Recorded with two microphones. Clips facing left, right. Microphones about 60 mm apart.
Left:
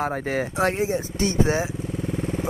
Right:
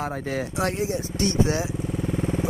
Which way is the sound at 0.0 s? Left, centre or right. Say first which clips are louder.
Left 3 dB; left.